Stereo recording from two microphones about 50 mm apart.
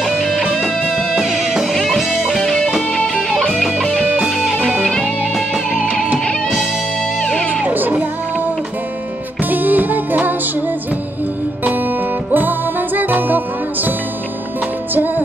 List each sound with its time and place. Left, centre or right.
0.0 s music: centre
0.6 s music: centre
1.2 s music: centre
2.4 s music: centre
3.6 s music: centre
5.7 s music: centre
7.2 s music: centre
7.6 s music: right
9.4 s music: right
12.4 s music: right